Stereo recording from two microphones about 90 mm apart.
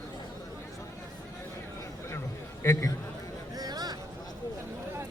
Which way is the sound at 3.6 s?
45° right (ahead or behind).